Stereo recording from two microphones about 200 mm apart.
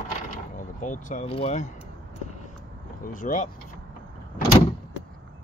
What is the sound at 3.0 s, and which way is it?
Speech, 40° left (ahead or behind).